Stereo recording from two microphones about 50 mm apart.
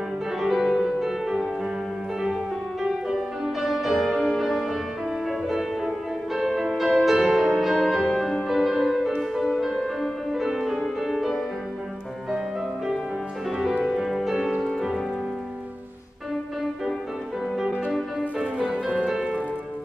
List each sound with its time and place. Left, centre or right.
0.4 s music: centre
2.8 s music: centre
13.5 s music: centre
18.4 s music: centre